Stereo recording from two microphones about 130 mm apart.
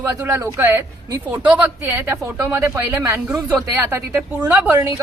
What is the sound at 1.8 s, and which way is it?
A woman's voice, 20° right (ahead or behind).